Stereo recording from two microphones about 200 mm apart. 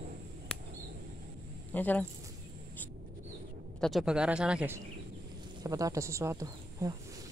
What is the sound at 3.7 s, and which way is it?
Speech, centre (ahead or behind).